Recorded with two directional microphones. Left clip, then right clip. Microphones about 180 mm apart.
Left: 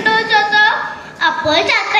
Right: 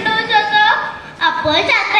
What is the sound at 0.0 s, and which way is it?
Music, 30° right (ahead or behind).